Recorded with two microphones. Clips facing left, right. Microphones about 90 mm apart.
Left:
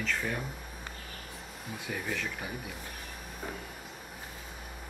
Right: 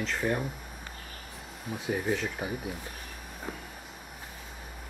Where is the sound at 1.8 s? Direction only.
25° right (ahead or behind).